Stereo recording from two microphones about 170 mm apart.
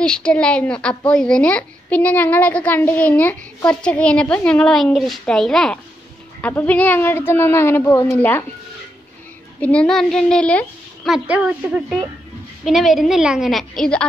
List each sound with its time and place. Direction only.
0.0 s a woman's voice: 5° left (ahead or behind)
9.6 s speech: 5° left (ahead or behind)
11.2 s a woman's voice: 10° right (ahead or behind)